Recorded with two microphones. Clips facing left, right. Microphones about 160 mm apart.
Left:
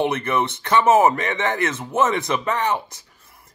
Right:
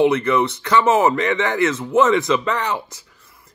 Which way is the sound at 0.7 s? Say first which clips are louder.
Left 1 dB; 25° left (ahead or behind).